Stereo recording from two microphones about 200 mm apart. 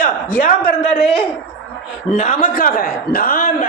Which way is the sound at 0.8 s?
30° left (ahead or behind).